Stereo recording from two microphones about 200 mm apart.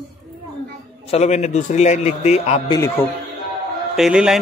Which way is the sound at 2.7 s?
15° left (ahead or behind).